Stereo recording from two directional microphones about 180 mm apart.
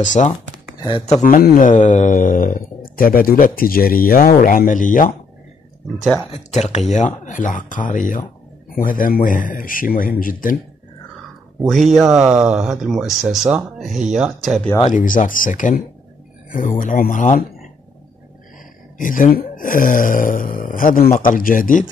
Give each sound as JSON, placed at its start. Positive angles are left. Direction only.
{"t": 0.0, "sound": "speech", "side_deg": 45}
{"t": 0.7, "sound": "speech", "side_deg": 25}
{"t": 1.2, "sound": "speech", "side_deg": 50}
{"t": 6.3, "sound": "speech", "side_deg": 40}
{"t": 11.6, "sound": "speech", "side_deg": 0}
{"t": 14.9, "sound": "speech", "side_deg": 45}
{"t": 18.9, "sound": "speech", "side_deg": 50}